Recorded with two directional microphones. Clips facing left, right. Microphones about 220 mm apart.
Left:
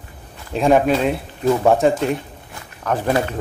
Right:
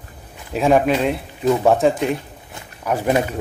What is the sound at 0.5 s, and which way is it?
Speech, 5° right (ahead or behind).